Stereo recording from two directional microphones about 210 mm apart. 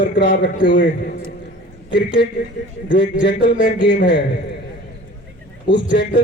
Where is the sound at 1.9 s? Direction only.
50° left (ahead or behind).